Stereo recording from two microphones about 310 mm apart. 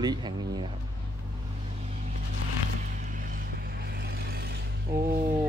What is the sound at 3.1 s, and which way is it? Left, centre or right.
Vehicle, right.